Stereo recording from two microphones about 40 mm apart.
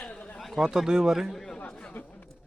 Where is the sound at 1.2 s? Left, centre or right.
Centre.